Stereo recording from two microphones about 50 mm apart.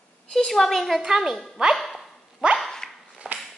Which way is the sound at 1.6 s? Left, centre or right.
Right.